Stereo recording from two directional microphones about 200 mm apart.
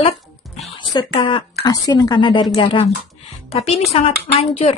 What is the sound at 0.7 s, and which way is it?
A woman's voice, 25° left (ahead or behind).